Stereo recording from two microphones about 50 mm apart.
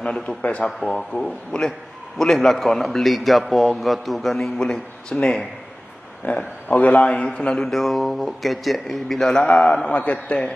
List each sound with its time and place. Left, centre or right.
0.4 s a man's voice: left
0.7 s a man's voice: centre
6.2 s a man's voice: left; by 9.4 s centre
9.4 s a man's voice: left